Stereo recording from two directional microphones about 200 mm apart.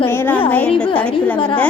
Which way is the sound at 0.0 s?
10° left (ahead or behind).